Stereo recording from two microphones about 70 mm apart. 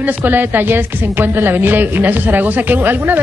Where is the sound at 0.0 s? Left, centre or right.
Right.